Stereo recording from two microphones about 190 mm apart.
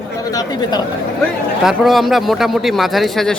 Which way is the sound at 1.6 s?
Centre (ahead or behind).